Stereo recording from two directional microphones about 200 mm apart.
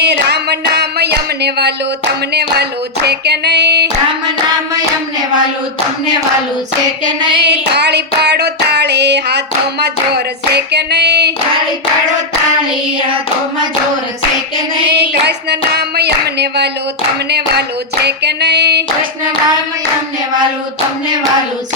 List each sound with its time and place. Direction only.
0.0 s a sound: 55° right (ahead or behind)
2.6 s female singing: 55° right (ahead or behind)
7.3 s child singing: 55° right (ahead or behind)
10.5 s female singing: 55° right (ahead or behind)
14.8 s a sound: 55° right (ahead or behind)
18.0 s female singing: 55° right (ahead or behind)